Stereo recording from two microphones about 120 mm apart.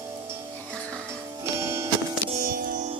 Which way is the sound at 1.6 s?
20° right (ahead or behind).